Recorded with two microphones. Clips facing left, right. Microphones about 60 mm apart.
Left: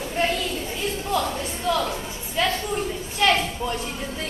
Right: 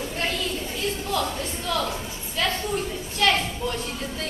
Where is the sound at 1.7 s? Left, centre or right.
Centre.